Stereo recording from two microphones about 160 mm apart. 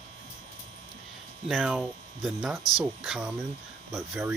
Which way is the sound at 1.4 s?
Centre (ahead or behind).